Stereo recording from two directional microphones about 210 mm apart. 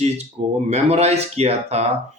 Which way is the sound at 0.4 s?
30° right (ahead or behind).